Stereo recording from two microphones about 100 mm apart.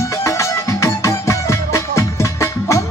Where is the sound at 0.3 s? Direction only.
30° left (ahead or behind).